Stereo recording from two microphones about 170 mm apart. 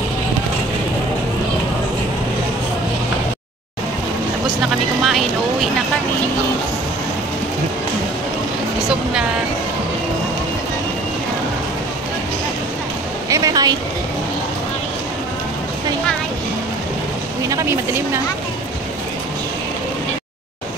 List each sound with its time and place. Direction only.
5.0 s vehicle: centre (ahead or behind)
13.3 s a sound: 20° right (ahead or behind)
17.5 s vehicle: 20° right (ahead or behind)